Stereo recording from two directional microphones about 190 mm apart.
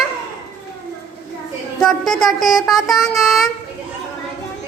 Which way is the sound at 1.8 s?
5° left (ahead or behind).